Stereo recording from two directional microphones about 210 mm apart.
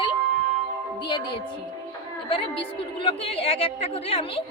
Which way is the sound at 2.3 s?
25° left (ahead or behind).